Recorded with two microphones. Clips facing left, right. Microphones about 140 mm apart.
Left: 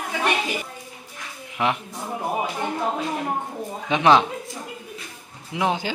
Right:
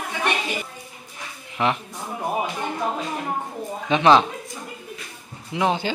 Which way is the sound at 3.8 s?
15° left (ahead or behind).